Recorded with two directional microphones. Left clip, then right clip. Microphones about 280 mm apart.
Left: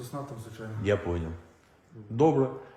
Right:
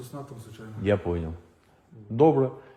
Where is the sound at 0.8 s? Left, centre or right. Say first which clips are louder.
Right 3 dB; right.